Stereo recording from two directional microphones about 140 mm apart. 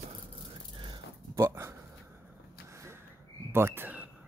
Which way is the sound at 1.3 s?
20° right (ahead or behind).